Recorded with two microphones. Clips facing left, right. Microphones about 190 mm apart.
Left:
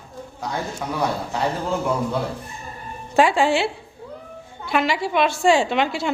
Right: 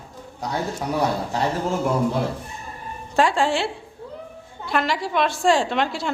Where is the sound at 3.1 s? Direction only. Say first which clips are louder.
Left 2 dB; 5° left (ahead or behind).